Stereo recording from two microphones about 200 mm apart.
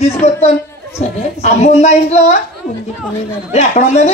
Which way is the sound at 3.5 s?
35° left (ahead or behind).